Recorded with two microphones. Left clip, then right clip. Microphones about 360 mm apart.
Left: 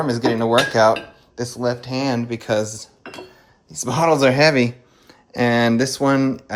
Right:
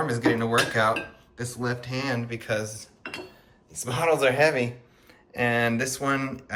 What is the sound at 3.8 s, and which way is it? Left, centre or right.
Speech, centre.